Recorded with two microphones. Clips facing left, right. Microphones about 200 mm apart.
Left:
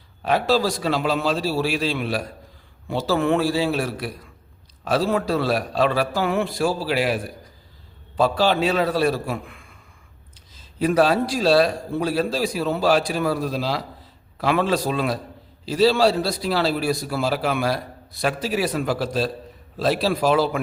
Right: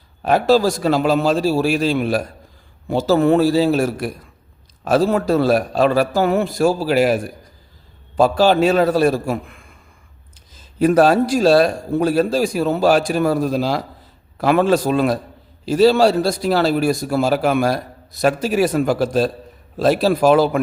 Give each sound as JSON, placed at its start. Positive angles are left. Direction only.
{"t": 0.3, "sound": "a man's voice", "side_deg": -45}